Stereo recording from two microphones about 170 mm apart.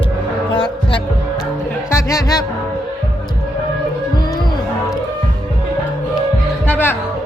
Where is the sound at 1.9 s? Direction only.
20° left (ahead or behind).